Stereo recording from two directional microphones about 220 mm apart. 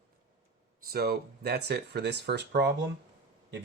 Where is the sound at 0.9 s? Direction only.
45° right (ahead or behind).